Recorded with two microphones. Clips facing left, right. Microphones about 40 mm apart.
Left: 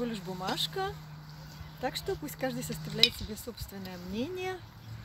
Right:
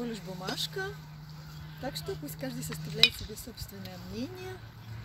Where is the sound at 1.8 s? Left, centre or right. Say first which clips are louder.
Left 3 dB; left.